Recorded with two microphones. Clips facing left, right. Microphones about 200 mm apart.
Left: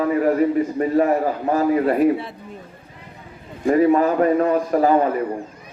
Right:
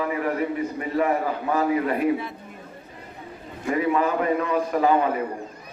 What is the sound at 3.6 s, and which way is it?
A man's voice, 40° left (ahead or behind).